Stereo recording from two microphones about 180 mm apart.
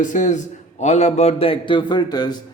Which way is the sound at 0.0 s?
45° left (ahead or behind).